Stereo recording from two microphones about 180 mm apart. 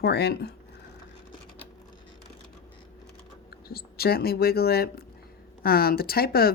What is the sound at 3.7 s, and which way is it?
Speech, 60° left (ahead or behind).